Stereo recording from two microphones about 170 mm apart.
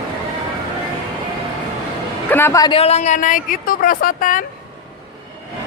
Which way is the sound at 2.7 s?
40° left (ahead or behind).